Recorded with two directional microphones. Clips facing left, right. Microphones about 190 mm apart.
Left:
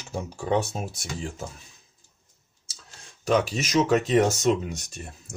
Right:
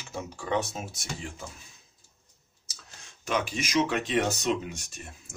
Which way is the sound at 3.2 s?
40° left (ahead or behind).